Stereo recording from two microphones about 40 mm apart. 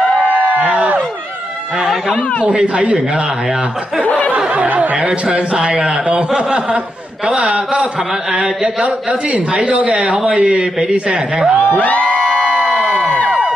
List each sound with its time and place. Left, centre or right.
0.3 s a sound: right
0.7 s a sound: right
2.6 s a man's voice: right
4.0 s speech: left
4.5 s speech: right
4.9 s a man's voice: right
8.8 s a man's voice: right
11.7 s speech: left
12.7 s crowd: right